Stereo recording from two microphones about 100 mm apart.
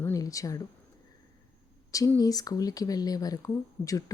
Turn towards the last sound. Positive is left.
turn(degrees=35)  # may be behind; listen again after turning